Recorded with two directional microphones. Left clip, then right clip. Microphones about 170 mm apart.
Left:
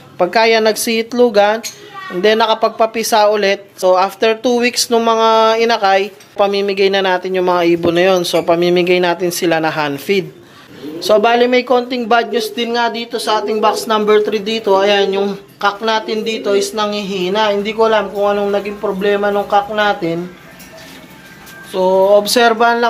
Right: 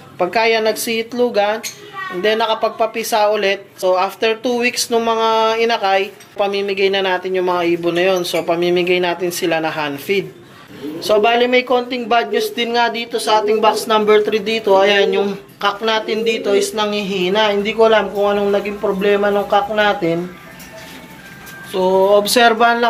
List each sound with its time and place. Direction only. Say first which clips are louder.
0.2 s speech: left 4 dB; 40° left (ahead or behind)
11.0 s speech: left 3 dB; 40° left (ahead or behind); by 20.2 s 5° left (ahead or behind)
21.7 s a sound: left 2 dB; 15° left (ahead or behind)